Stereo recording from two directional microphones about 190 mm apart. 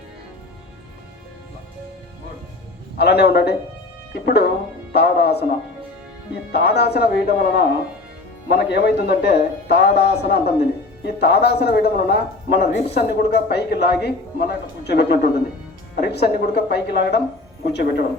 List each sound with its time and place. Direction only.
3.0 s speech: 60° left (ahead or behind)
4.9 s music: 60° left (ahead or behind)
6.5 s speech: 60° left (ahead or behind)